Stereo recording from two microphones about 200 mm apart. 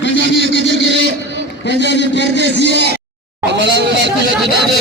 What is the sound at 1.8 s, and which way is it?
A man's voice, 60° left (ahead or behind).